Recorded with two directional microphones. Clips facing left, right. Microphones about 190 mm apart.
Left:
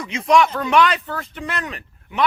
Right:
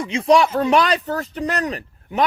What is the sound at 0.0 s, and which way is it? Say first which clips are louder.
Speech: right 1 dB; 30° right (ahead or behind).